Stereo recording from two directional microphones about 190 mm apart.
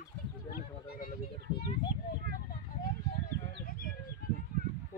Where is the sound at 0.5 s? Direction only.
50° left (ahead or behind).